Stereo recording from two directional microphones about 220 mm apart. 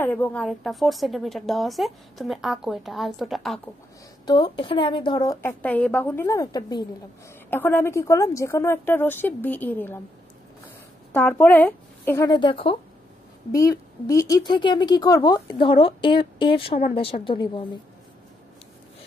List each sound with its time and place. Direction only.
0.0 s a woman's voice: 10° left (ahead or behind)
4.3 s a woman's voice: 20° left (ahead or behind)
11.1 s a woman's voice: 10° left (ahead or behind)
12.3 s speech: 20° left (ahead or behind)